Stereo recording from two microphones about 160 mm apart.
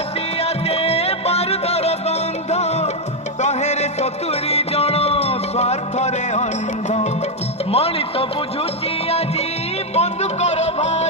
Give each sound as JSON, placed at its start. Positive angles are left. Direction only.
{"t": 0.4, "sound": "music", "side_deg": 40}
{"t": 7.7, "sound": "music", "side_deg": 40}
{"t": 9.9, "sound": "music", "side_deg": 45}